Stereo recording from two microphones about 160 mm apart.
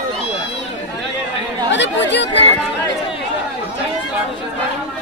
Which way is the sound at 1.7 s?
90° left.